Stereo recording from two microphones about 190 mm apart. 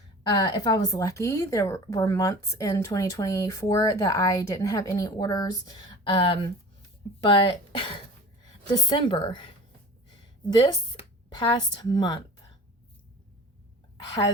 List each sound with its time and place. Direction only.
0.3 s a woman's voice: 20° left (ahead or behind)
10.5 s speech: 25° left (ahead or behind)
14.0 s a woman's voice: 20° left (ahead or behind)